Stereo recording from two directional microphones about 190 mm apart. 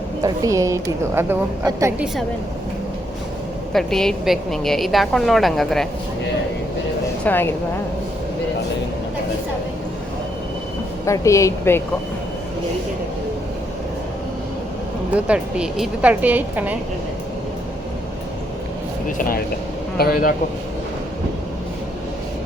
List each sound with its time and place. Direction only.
0.2 s a woman's voice: 20° right (ahead or behind)
3.7 s a woman's voice: centre (ahead or behind)
7.3 s a woman's voice: 10° left (ahead or behind)
11.0 s a woman's voice: 15° left (ahead or behind)
15.1 s a woman's voice: 5° right (ahead or behind)
19.0 s speech: 45° left (ahead or behind)